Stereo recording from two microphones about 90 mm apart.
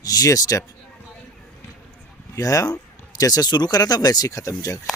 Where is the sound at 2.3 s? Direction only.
40° left (ahead or behind).